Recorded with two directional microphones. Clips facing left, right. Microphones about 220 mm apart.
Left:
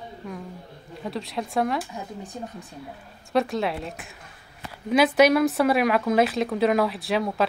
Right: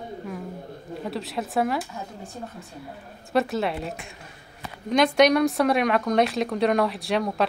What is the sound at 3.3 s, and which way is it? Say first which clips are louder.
Speech: even; centre (ahead or behind).